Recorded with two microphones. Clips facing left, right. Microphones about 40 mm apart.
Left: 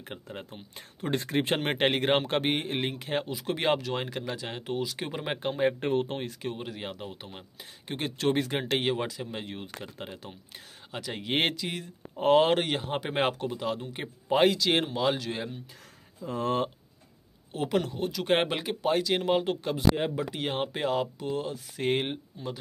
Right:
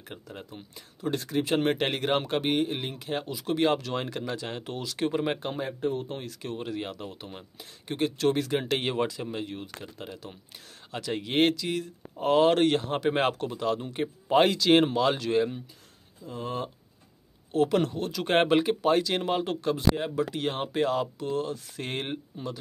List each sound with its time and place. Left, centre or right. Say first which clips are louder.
0.1 s speech: even; left
1.7 s speech: left 1 dB; left
2.4 s speech: right 1 dB; centre
5.7 s speech: left 3 dB; left
6.4 s speech: right 2 dB; centre
8.7 s speech: right 1 dB; centre
9.3 s speech: right 3 dB; left
10.9 s speech: right 2 dB; centre
11.3 s speech: right 4 dB; centre
12.5 s speech: right 5 dB; centre
16.3 s speech: left 5 dB; left
17.5 s speech: right 8 dB; centre
18.1 s speech: right 4 dB; centre